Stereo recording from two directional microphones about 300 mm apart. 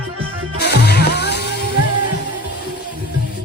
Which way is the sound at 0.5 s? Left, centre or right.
Left.